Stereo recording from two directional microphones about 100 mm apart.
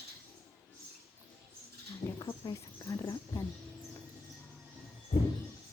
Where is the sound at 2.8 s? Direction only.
30° left (ahead or behind).